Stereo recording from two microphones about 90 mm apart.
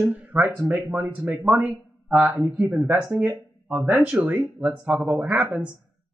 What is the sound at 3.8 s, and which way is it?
Speech, 10° right (ahead or behind).